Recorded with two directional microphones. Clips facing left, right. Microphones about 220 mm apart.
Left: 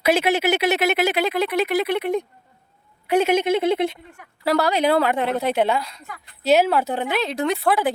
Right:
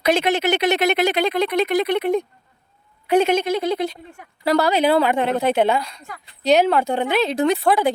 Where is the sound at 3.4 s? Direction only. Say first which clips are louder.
Left 2 dB; 25° left (ahead or behind).